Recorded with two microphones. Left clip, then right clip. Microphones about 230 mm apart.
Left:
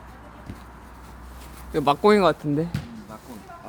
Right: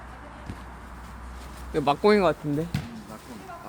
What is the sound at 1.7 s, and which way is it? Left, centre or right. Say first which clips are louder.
Speech: left 3 dB; centre.